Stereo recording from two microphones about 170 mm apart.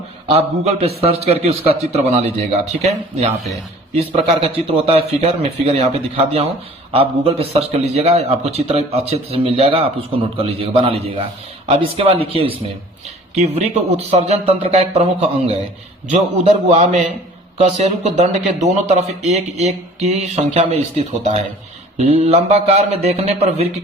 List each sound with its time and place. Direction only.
0.3 s a man's voice: 35° right (ahead or behind)
6.9 s a man's voice: 35° right (ahead or behind)